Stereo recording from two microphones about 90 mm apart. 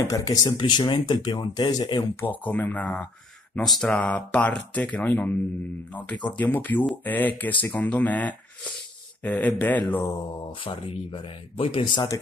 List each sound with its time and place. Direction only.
0.0 s speech: 40° left (ahead or behind)
2.1 s speech: 20° left (ahead or behind)
3.6 s speech: centre (ahead or behind)
3.9 s speech: 15° left (ahead or behind)
6.3 s speech: 20° left (ahead or behind)
10.6 s speech: 80° left